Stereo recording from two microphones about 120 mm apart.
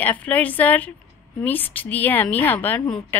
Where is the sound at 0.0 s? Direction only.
15° left (ahead or behind).